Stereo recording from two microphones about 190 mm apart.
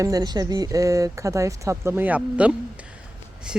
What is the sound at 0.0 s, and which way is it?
Speech, 20° right (ahead or behind).